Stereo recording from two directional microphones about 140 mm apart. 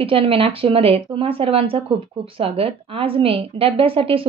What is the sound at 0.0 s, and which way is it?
A woman's voice, 40° right (ahead or behind).